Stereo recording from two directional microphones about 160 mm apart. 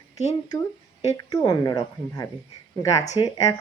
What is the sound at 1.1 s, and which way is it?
Speech, 25° left (ahead or behind).